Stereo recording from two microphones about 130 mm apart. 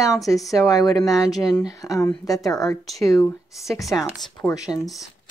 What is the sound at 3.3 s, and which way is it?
Speech, centre (ahead or behind).